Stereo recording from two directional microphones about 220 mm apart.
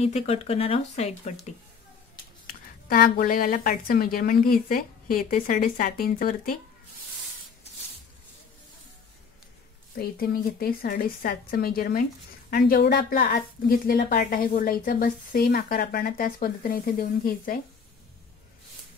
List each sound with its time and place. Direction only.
0.0 s speech: 30° left (ahead or behind)
2.4 s a woman's voice: 40° left (ahead or behind)
9.9 s a woman's voice: 40° left (ahead or behind)